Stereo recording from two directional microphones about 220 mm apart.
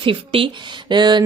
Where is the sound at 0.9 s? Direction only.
20° right (ahead or behind).